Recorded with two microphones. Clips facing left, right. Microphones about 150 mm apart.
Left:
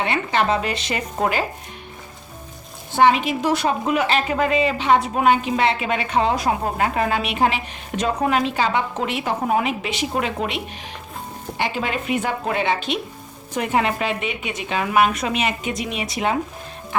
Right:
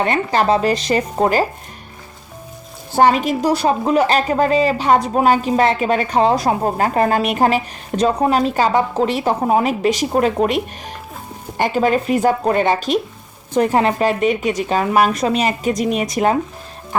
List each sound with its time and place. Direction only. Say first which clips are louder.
0.0 s a woman's voice: right 4 dB; 40° right (ahead or behind)
2.9 s a woman's voice: right 3 dB; 40° right (ahead or behind)